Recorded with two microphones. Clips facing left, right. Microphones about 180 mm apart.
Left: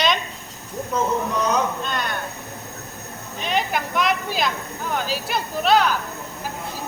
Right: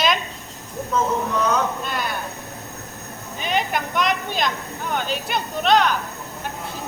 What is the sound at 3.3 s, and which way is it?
Speech, centre (ahead or behind).